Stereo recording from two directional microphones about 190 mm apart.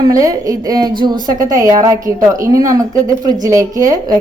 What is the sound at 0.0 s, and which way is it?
A woman's voice, 20° right (ahead or behind).